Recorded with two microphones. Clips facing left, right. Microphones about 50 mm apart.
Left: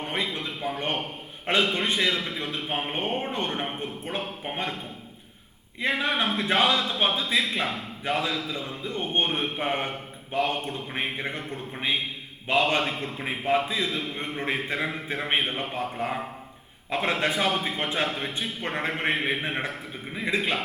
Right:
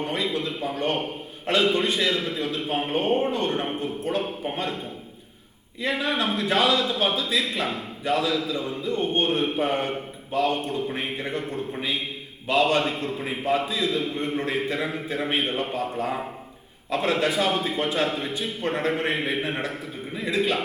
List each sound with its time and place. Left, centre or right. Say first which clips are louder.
0.0 s a man's voice: right 3 dB; left
5.8 s a man's voice: even; left
12.5 s a man's voice: right 2 dB; left